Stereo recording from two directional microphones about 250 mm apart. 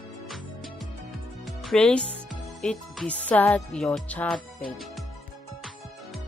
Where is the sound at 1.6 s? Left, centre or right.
Centre.